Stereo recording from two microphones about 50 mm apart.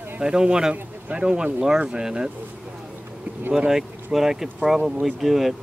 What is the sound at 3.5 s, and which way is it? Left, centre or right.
Speech, centre.